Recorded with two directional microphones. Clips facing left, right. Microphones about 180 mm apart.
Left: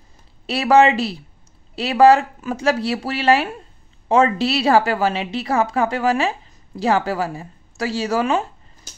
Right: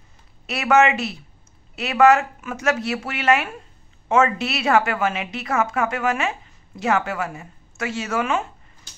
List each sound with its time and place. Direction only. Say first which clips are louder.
0.5 s a woman's voice: left 3 dB; 30° left (ahead or behind)